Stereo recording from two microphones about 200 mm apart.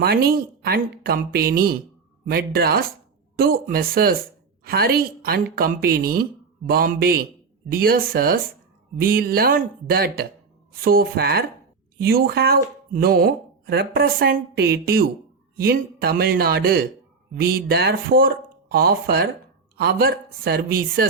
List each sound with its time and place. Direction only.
0.0 s speech: 50° right (ahead or behind)